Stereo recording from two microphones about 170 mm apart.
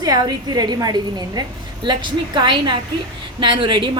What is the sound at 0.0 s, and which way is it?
Speech, 20° right (ahead or behind).